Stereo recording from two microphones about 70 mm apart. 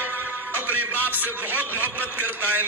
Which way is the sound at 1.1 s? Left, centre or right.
Right.